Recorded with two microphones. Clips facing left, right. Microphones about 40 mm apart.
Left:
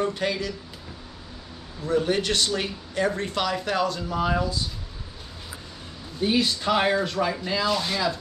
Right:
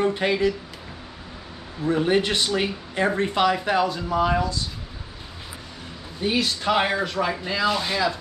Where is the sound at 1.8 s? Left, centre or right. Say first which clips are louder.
Right 3 dB; right.